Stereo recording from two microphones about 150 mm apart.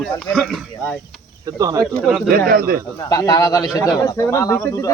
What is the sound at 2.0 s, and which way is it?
Speech, centre (ahead or behind).